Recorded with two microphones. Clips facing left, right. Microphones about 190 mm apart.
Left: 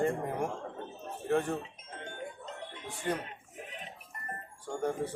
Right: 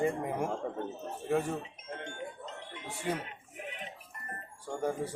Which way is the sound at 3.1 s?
5° right (ahead or behind).